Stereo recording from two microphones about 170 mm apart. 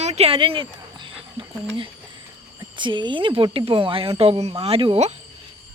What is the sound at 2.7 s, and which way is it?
A woman's voice, 30° right (ahead or behind).